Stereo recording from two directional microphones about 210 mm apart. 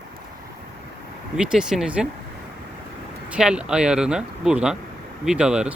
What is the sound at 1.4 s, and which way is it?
Speech, 5° right (ahead or behind).